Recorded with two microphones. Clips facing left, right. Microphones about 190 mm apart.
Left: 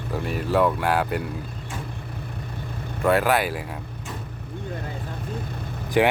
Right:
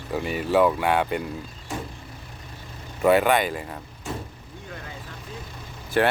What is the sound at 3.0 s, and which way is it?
Speech, centre (ahead or behind).